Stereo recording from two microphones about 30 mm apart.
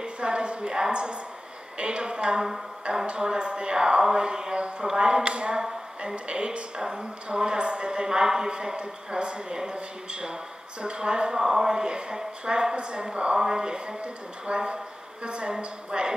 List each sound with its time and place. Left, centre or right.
0.0 s a woman's voice: right
11.3 s a woman's voice: centre